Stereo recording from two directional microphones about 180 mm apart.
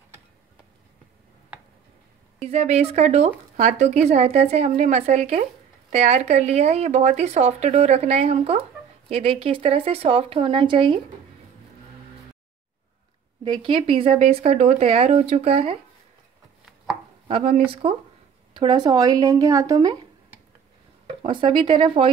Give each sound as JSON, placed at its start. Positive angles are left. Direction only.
{"t": 2.4, "sound": "speech", "side_deg": -35}
{"t": 13.4, "sound": "speech", "side_deg": -25}
{"t": 17.3, "sound": "speech", "side_deg": -35}
{"t": 21.2, "sound": "speech", "side_deg": -25}